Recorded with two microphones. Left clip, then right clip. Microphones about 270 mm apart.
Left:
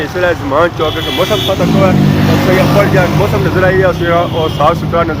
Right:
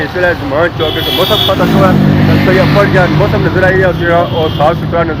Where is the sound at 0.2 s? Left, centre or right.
Centre.